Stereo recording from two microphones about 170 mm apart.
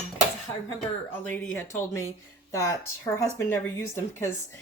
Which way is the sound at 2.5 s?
15° left (ahead or behind).